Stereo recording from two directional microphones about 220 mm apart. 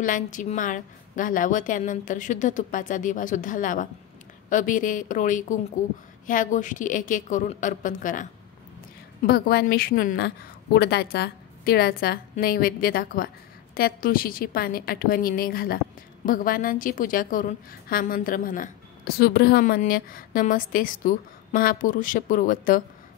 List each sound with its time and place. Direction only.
0.0 s a woman's voice: 35° left (ahead or behind)
9.3 s a woman's voice: 45° left (ahead or behind)